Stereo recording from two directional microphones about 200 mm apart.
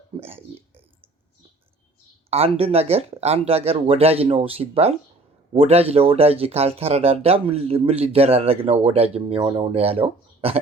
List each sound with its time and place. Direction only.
0.2 s speech: 30° right (ahead or behind)
2.3 s speech: 30° right (ahead or behind)